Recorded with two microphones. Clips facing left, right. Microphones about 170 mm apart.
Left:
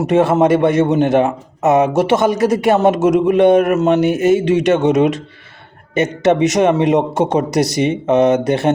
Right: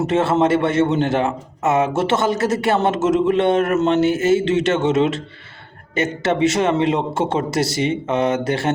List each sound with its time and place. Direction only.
0.0 s a man's voice: 15° left (ahead or behind)